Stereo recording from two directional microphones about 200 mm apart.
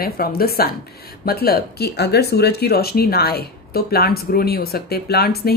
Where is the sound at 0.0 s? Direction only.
50° left (ahead or behind).